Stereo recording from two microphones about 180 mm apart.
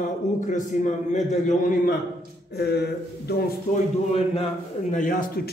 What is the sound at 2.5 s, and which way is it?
Speech, 65° left (ahead or behind).